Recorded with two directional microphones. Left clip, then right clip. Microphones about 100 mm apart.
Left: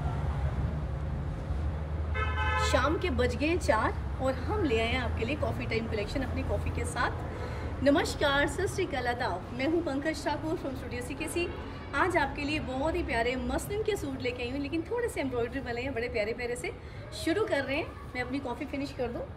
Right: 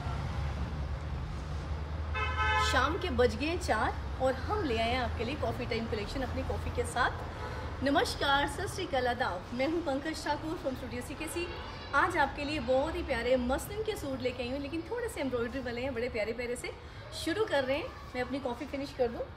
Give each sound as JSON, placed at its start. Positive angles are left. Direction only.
{"t": 2.6, "sound": "a woman's voice", "side_deg": -25}
{"t": 7.8, "sound": "a woman's voice", "side_deg": -25}
{"t": 11.9, "sound": "a woman's voice", "side_deg": -25}